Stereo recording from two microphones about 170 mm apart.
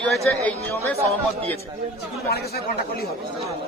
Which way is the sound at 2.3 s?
65° left (ahead or behind).